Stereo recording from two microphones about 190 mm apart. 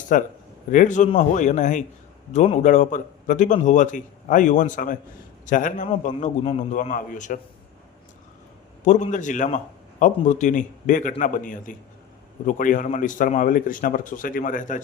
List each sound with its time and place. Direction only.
0.1 s a man's voice: 45° left (ahead or behind)
8.8 s a man's voice: 40° left (ahead or behind)